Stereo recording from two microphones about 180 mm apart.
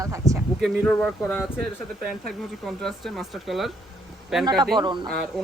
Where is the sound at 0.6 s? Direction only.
10° left (ahead or behind).